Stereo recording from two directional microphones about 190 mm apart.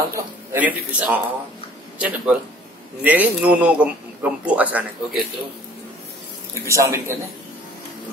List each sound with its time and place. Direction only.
0.1 s a man's voice: 10° right (ahead or behind)
6.6 s a man's voice: 15° right (ahead or behind)